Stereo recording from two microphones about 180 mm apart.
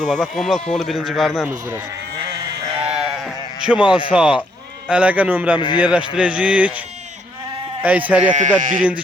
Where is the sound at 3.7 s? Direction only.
25° left (ahead or behind).